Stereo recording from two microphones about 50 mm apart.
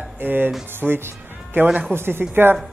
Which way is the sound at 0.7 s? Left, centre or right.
Right.